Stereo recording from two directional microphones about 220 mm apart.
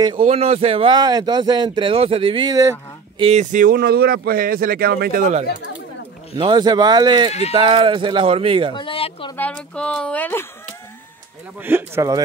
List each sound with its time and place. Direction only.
0.2 s speech: 30° right (ahead or behind)
3.3 s speech: 35° right (ahead or behind)
6.3 s speech: 20° right (ahead or behind)
8.7 s speech: 25° left (ahead or behind)
9.4 s speech: 5° left (ahead or behind)
11.6 s speech: 10° right (ahead or behind)